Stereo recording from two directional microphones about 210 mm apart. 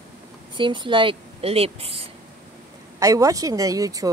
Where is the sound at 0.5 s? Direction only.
25° right (ahead or behind).